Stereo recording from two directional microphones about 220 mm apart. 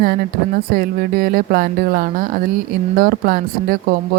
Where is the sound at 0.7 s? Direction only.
40° right (ahead or behind).